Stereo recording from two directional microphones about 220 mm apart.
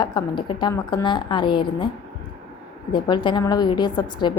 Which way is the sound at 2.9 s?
20° left (ahead or behind).